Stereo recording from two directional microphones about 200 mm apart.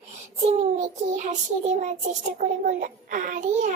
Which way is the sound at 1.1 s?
35° right (ahead or behind).